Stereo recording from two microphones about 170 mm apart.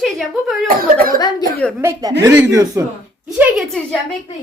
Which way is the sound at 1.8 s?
20° right (ahead or behind).